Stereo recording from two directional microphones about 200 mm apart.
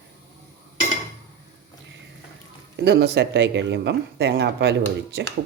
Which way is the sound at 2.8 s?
55° right (ahead or behind).